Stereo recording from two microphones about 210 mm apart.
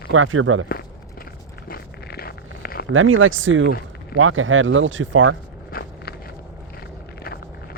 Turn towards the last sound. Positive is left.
turn(degrees=45)  # may be behind; listen again after turning